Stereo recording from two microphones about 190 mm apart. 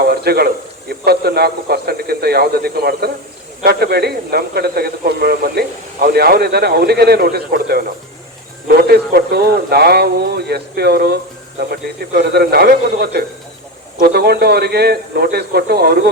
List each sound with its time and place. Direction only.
0.0 s a man's voice: 55° right (ahead or behind)